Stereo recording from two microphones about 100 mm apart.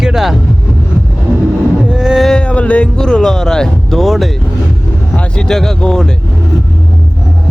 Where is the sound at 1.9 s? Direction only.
5° right (ahead or behind).